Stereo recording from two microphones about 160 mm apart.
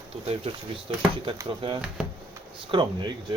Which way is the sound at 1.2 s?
30° right (ahead or behind).